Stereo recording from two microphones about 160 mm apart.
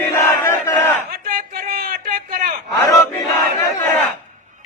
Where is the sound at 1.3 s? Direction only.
65° right (ahead or behind).